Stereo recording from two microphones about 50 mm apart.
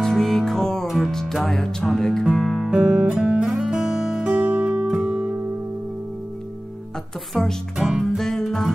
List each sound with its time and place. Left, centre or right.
0.0 s music: centre
0.8 s music: centre
1.5 s music: centre
2.3 s music: centre
2.7 s guitar: centre
3.5 s music: centre
4.5 s music: right
7.3 s music: centre
7.7 s music: centre
8.2 s music: centre